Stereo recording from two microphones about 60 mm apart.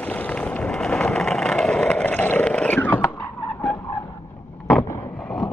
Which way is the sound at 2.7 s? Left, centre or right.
Left.